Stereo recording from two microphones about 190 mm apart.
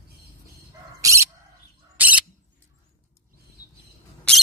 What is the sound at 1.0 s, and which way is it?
Bird, 15° right (ahead or behind).